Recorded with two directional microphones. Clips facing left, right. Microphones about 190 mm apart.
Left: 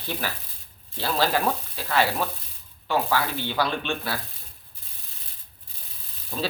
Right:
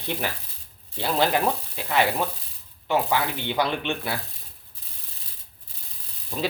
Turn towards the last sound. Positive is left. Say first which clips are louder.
# right 2 dB
turn(degrees=-15)  # may be behind; listen again after turning